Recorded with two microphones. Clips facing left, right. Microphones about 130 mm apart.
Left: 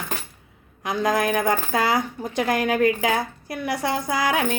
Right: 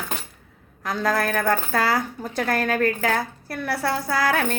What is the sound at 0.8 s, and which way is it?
A woman's voice, 15° left (ahead or behind).